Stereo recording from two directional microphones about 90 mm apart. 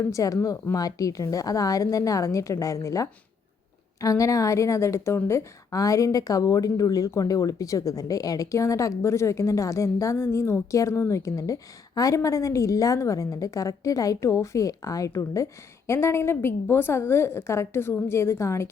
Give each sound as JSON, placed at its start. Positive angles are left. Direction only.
{"t": 0.0, "sound": "a woman's voice", "side_deg": 35}